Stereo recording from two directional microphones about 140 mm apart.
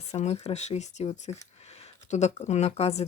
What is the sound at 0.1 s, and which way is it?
Speech, 50° left (ahead or behind).